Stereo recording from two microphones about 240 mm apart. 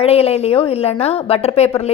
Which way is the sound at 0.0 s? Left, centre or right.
Left.